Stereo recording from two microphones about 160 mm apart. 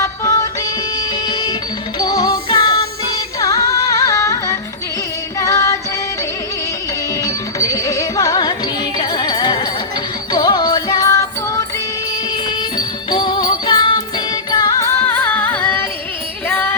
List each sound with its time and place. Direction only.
0.0 s music: 20° left (ahead or behind)
7.3 s music: 20° left (ahead or behind)
12.7 s music: 30° left (ahead or behind)